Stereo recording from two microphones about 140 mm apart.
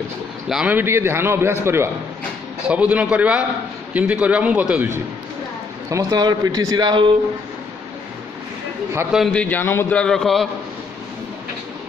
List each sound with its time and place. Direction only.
0.5 s a man's voice: 5° right (ahead or behind)
5.9 s speech: 25° right (ahead or behind)
9.3 s a man's voice: 10° left (ahead or behind)